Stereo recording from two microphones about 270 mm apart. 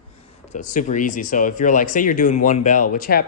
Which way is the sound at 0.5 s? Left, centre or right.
Left.